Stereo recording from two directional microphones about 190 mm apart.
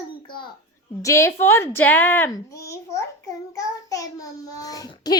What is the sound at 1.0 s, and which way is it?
A woman's voice, 15° left (ahead or behind).